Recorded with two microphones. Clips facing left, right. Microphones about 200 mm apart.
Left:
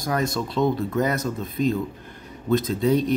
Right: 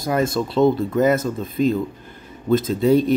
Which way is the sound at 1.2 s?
Centre (ahead or behind).